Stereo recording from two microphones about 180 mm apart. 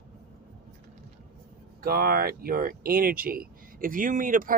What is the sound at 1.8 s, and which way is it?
Speech, 55° right (ahead or behind).